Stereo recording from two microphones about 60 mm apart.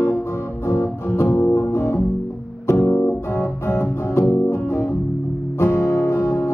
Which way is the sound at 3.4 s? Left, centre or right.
Left.